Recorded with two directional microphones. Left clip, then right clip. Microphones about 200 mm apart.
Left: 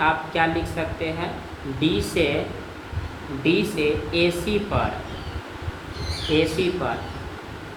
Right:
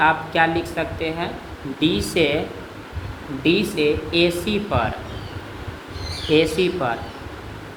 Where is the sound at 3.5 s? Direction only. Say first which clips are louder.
Right 3 dB; 50° right (ahead or behind).